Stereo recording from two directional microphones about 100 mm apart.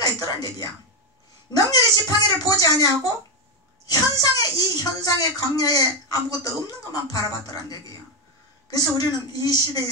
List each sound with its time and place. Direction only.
0.0 s speech: 40° left (ahead or behind)
8.9 s speech: 40° left (ahead or behind)